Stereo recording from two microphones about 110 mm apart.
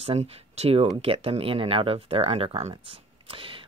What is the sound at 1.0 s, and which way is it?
Speech, 60° right (ahead or behind).